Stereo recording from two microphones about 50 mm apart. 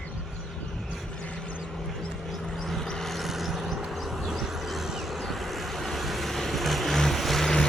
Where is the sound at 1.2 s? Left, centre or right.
Left.